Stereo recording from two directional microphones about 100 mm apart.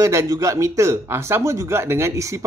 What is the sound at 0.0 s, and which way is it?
A man's voice, 30° right (ahead or behind).